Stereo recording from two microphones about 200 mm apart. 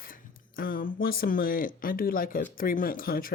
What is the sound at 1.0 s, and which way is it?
A woman's voice, 50° left (ahead or behind).